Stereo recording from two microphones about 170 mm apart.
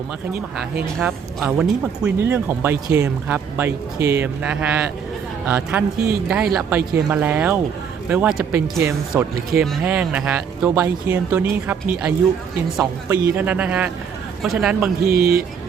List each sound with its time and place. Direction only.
1.4 s speech: 5° right (ahead or behind)
15.0 s speech: 65° right (ahead or behind)